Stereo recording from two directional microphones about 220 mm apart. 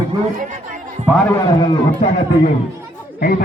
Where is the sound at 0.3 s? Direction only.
35° right (ahead or behind).